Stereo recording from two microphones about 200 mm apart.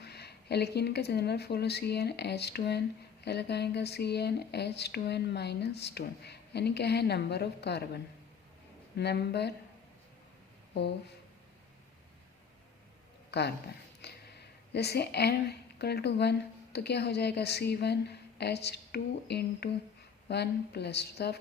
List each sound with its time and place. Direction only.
0.0 s speech: 55° left (ahead or behind)
13.3 s speech: 55° left (ahead or behind)
14.0 s a sound: 55° left (ahead or behind)
16.7 s speech: 55° left (ahead or behind)